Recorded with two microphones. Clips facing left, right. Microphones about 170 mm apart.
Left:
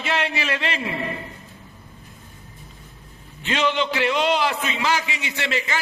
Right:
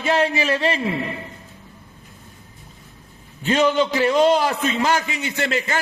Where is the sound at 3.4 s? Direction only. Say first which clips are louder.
Right 5 dB; 40° right (ahead or behind).